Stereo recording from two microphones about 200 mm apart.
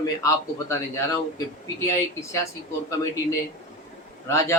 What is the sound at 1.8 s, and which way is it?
Speech, 15° left (ahead or behind).